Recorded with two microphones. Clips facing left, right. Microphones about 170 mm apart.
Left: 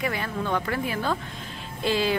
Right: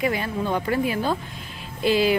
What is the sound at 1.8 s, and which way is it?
Music, 10° right (ahead or behind).